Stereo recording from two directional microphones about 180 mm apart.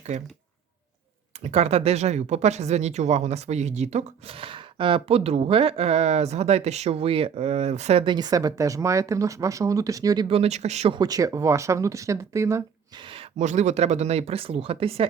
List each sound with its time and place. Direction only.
1.5 s speech: 35° right (ahead or behind); by 12.6 s 15° right (ahead or behind)
13.1 s speech: 35° right (ahead or behind)